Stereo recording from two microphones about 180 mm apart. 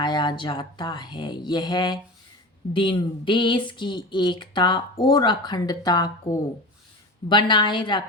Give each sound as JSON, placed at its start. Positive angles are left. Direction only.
{"t": 0.0, "sound": "speech", "side_deg": 25}